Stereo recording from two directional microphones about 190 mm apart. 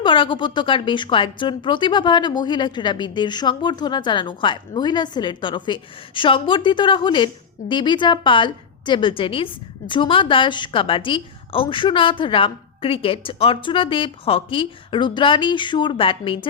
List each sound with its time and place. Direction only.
0.0 s a woman's voice: 25° left (ahead or behind)